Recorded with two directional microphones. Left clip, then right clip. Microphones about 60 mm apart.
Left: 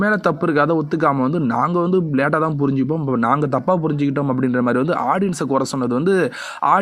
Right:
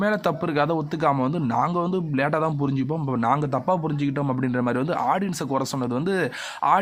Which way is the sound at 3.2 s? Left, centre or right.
Left.